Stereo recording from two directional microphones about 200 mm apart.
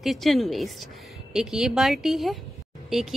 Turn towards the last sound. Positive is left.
turn(degrees=0)  # may be behind; listen again after turning